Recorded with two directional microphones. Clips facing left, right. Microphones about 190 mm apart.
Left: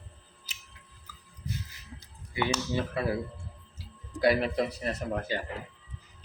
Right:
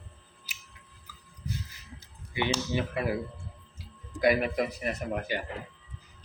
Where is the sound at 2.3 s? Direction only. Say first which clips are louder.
Even; 15° right (ahead or behind).